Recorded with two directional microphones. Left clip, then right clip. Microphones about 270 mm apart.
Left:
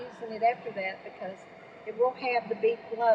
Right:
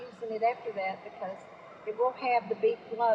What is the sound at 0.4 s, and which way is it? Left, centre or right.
Speech, centre.